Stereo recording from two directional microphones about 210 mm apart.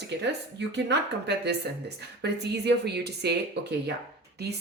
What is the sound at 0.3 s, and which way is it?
A woman's voice, 55° right (ahead or behind).